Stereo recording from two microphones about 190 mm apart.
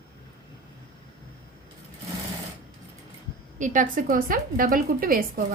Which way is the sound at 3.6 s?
45° right (ahead or behind).